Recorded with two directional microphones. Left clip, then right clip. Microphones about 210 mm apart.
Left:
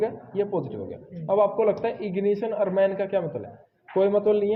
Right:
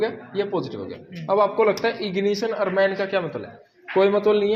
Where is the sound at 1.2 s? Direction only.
15° right (ahead or behind).